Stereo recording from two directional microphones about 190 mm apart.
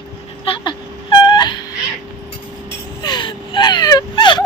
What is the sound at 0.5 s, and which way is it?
Whimper, 25° left (ahead or behind).